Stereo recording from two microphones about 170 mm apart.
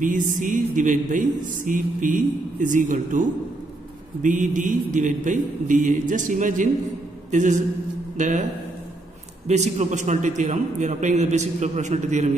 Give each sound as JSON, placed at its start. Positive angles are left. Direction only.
{"t": 0.0, "sound": "a man's voice", "side_deg": -50}
{"t": 9.5, "sound": "a man's voice", "side_deg": -40}